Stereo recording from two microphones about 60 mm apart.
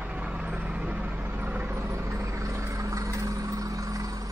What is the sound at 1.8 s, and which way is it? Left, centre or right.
Vehicle, right.